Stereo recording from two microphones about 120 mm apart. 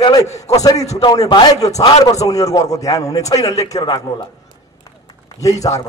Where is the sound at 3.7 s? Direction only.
40° left (ahead or behind).